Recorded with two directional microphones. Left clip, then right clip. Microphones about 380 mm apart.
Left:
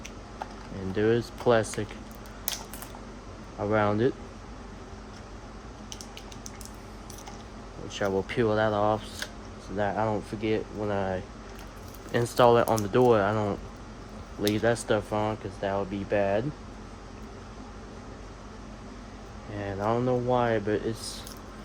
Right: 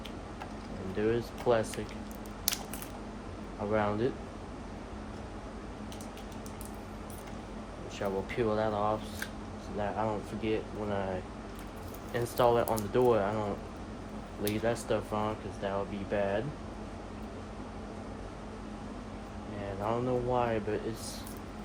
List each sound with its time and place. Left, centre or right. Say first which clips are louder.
0.9 s speech: left 6 dB; left
3.7 s speech: left 5 dB; left
7.9 s speech: left 6 dB; left
12.1 s speech: left 6 dB; left
14.4 s speech: left 6 dB; left
19.8 s speech: left 5 dB; left